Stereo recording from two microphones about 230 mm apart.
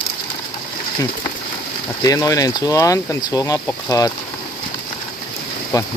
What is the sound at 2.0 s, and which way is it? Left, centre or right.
Speech, centre.